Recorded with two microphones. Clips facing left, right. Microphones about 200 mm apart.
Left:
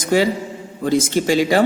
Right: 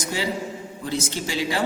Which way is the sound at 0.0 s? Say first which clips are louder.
Left 9 dB; 80° left.